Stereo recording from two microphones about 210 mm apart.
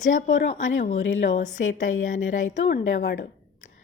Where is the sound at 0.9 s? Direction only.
65° left (ahead or behind).